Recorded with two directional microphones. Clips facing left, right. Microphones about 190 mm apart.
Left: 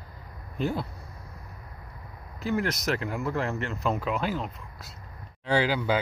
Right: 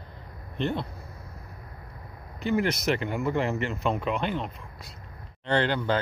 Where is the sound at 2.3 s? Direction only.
Centre (ahead or behind).